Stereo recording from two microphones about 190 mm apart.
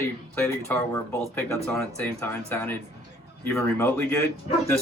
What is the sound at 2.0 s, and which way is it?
Speech, 10° left (ahead or behind).